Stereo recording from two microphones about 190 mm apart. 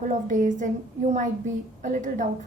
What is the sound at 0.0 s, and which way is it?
A woman's voice, 40° right (ahead or behind).